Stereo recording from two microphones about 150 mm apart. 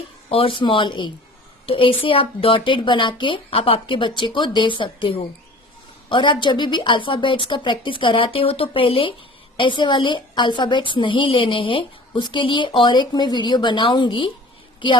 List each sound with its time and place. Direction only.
0.3 s a woman's voice: 40° left (ahead or behind)